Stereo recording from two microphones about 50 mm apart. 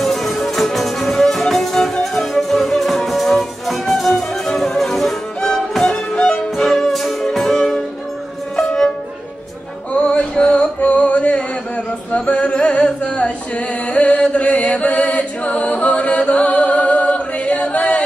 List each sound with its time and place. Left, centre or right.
0.0 s music: centre
10.0 s music: left